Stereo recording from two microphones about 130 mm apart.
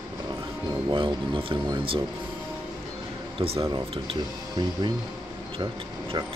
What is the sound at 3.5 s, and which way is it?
A man's voice, 25° right (ahead or behind).